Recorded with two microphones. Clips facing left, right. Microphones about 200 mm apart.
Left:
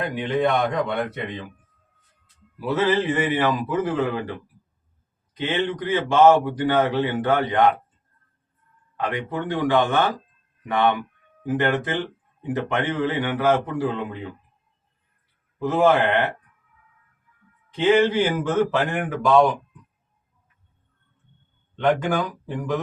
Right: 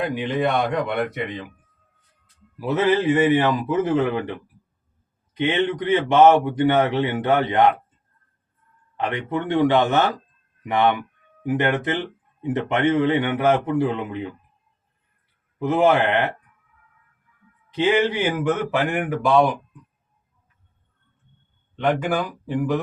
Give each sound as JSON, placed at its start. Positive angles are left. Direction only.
{"t": 0.2, "sound": "a man's voice", "side_deg": -10}
{"t": 2.6, "sound": "a man's voice", "side_deg": -20}
{"t": 5.3, "sound": "a man's voice", "side_deg": -25}
{"t": 9.0, "sound": "a man's voice", "side_deg": -25}
{"t": 15.5, "sound": "a man's voice", "side_deg": -20}
{"t": 17.9, "sound": "a man's voice", "side_deg": -15}
{"t": 21.8, "sound": "a man's voice", "side_deg": -10}